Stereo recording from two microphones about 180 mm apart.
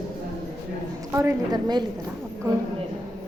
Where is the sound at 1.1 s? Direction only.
15° right (ahead or behind).